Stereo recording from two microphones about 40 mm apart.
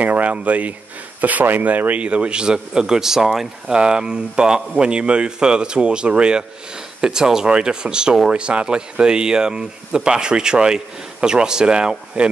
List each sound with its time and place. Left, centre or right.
0.0 s speech: right
1.2 s speech: right
2.0 s speech: right; by 3.4 s centre
3.6 s speech: right